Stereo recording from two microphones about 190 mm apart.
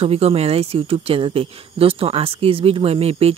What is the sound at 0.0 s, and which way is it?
Speech, 30° right (ahead or behind).